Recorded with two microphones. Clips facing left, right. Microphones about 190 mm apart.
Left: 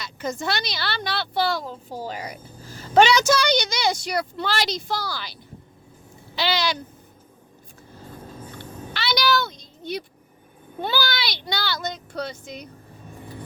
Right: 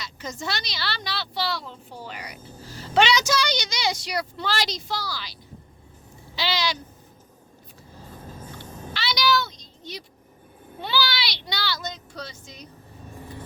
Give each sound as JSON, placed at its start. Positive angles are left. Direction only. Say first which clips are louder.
{"t": 0.0, "sound": "a woman's voice", "louder": "left 5 dB", "side_deg": 55}
{"t": 6.3, "sound": "owl", "louder": "left 3 dB", "side_deg": 55}
{"t": 8.9, "sound": "a sound", "louder": "left 1 dB", "side_deg": 55}
{"t": 10.8, "sound": "a woman's voice", "louder": "left 2 dB", "side_deg": 50}